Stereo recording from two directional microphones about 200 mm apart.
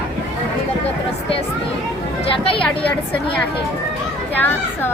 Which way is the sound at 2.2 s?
25° left (ahead or behind).